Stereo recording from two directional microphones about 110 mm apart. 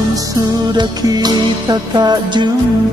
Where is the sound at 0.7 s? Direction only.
40° right (ahead or behind).